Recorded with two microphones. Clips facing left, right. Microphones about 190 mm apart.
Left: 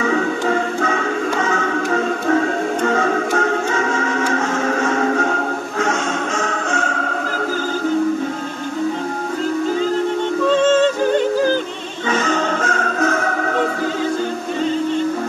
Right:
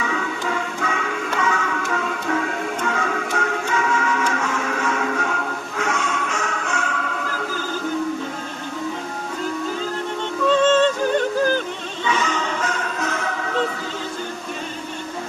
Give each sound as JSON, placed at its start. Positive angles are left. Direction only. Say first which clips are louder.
{"t": 0.0, "sound": "music", "louder": "left 7 dB", "side_deg": 45}
{"t": 12.1, "sound": "music", "louder": "left 5 dB", "side_deg": 45}